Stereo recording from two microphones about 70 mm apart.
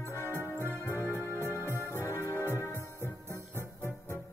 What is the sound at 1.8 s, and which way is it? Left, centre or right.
Organ, left.